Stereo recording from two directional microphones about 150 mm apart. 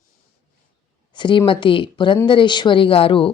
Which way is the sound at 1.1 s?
30° left (ahead or behind).